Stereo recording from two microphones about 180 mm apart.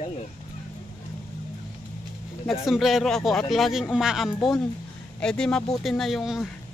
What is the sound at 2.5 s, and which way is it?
A man's voice, centre (ahead or behind).